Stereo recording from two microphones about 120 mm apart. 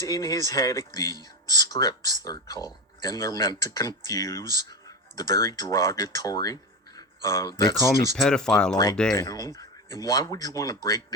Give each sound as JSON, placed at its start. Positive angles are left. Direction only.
{"t": 0.0, "sound": "speech", "side_deg": 30}
{"t": 8.1, "sound": "speech", "side_deg": 5}
{"t": 8.7, "sound": "speech", "side_deg": 35}